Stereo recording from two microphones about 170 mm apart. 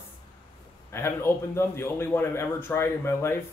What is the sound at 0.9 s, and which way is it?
A man's voice, 15° left (ahead or behind).